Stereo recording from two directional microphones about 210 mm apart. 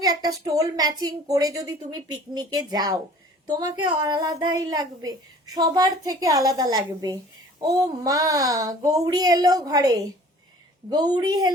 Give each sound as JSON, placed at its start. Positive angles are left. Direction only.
{"t": 0.0, "sound": "a woman's voice", "side_deg": -20}